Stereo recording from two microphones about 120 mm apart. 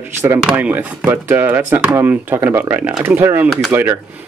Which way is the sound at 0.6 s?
15° right (ahead or behind).